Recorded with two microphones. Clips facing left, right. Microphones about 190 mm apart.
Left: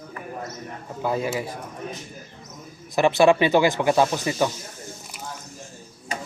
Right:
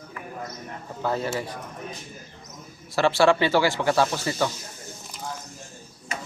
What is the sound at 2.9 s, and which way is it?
Speech, 15° left (ahead or behind).